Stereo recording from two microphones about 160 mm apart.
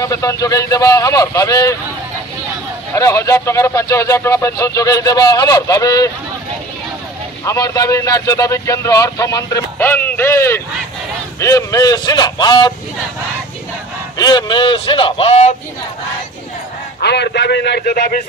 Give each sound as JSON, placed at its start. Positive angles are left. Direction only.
{"t": 0.0, "sound": "speech", "side_deg": 20}
{"t": 2.9, "sound": "speech", "side_deg": 20}
{"t": 7.4, "sound": "speech", "side_deg": 20}
{"t": 14.1, "sound": "speech", "side_deg": 25}
{"t": 17.0, "sound": "a man's voice", "side_deg": 90}